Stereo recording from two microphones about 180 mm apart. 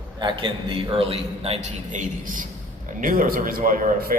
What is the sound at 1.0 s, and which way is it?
A man's voice, 35° right (ahead or behind).